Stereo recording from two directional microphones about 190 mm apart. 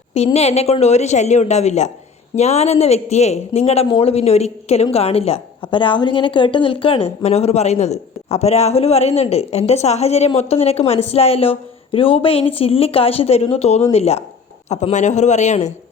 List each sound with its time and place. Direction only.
0.3 s speech: 35° left (ahead or behind)